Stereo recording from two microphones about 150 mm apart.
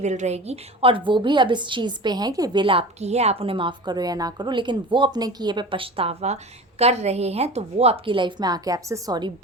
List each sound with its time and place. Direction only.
0.0 s a woman's voice: 50° right (ahead or behind); by 9.3 s 25° right (ahead or behind)